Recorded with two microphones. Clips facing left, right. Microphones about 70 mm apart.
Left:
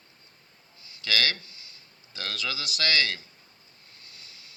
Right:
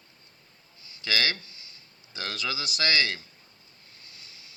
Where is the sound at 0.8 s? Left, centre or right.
Right.